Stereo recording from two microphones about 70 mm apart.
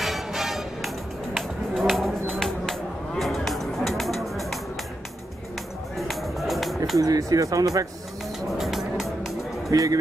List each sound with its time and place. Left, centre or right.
0.0 s music: centre
5.9 s music: centre
7.0 s speech: right
8.5 s music: centre
9.7 s speech: right